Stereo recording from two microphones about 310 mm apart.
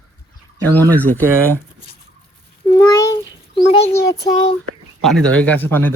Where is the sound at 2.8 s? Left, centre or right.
Centre.